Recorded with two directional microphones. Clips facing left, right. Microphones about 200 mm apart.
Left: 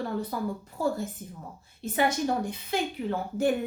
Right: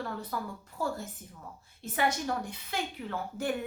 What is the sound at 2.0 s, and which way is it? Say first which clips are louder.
A woman's voice: left 4 dB; 20° left (ahead or behind).